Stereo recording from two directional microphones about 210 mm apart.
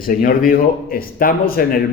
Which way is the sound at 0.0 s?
40° left (ahead or behind).